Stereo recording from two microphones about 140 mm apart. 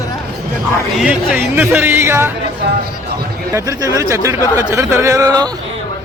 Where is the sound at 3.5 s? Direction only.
25° right (ahead or behind).